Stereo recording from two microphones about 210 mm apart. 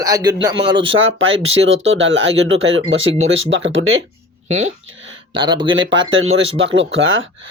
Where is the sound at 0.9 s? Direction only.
70° right (ahead or behind).